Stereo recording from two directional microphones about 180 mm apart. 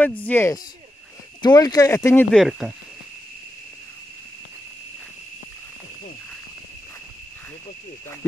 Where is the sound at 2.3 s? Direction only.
Centre (ahead or behind).